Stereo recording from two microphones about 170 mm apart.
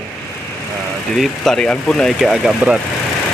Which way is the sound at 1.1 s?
Centre (ahead or behind).